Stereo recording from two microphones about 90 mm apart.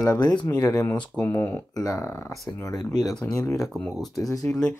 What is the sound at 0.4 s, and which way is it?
Speech, 45° left (ahead or behind).